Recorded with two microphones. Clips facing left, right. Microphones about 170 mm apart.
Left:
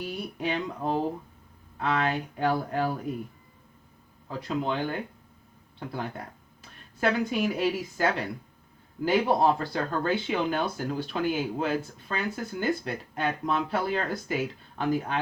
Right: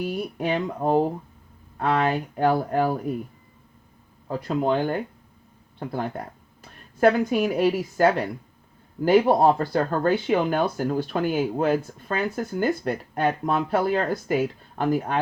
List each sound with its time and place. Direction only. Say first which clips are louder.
0.0 s speech: right 5 dB; 50° right (ahead or behind)
4.3 s speech: right 6 dB; 50° right (ahead or behind)